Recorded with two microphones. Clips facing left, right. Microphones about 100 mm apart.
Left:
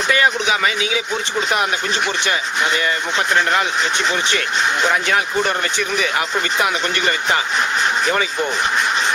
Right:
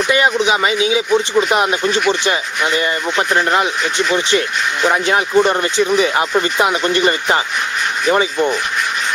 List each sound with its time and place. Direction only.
0.1 s speech: 20° right (ahead or behind)
3.3 s speech: 25° right (ahead or behind)
5.0 s speech: 25° right (ahead or behind)